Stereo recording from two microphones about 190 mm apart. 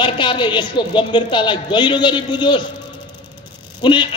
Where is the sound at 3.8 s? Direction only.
25° left (ahead or behind).